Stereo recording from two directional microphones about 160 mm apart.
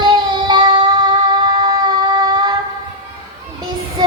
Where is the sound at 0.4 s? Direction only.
30° right (ahead or behind).